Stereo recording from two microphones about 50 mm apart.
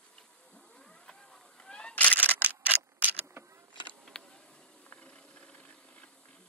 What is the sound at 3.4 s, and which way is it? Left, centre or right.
Insect, right.